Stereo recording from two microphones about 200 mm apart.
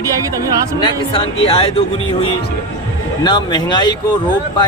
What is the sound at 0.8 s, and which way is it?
Speech, 25° left (ahead or behind).